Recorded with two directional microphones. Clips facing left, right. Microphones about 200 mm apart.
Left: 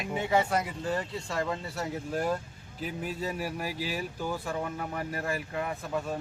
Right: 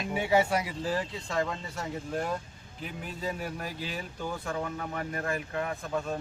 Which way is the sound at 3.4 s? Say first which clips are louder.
Left 3 dB; 10° left (ahead or behind).